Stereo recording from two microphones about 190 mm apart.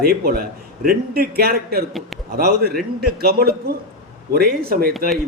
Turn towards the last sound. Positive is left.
turn(degrees=-50)  # may be behind; listen again after turning